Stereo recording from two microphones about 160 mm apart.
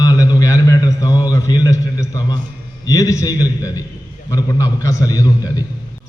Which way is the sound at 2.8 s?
20° left (ahead or behind).